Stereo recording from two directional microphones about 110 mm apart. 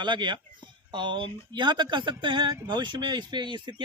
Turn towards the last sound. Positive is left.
turn(degrees=-45)  # may be behind; listen again after turning